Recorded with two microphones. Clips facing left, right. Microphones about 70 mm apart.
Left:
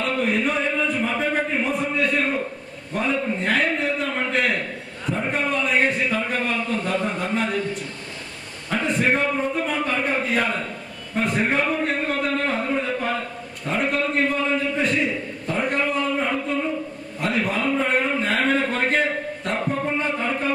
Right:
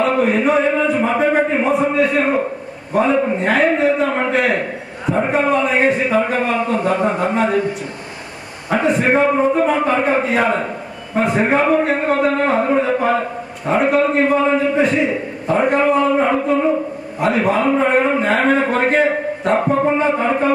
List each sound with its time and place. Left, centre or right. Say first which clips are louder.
0.0 s a sound: right 7 dB; centre
2.9 s a man's voice: right 9 dB; centre
3.2 s a man's voice: right 8 dB; right
3.4 s a man's voice: right 7 dB; centre
4.6 s a sound: right 6 dB; centre
5.3 s a man's voice: right 6 dB; centre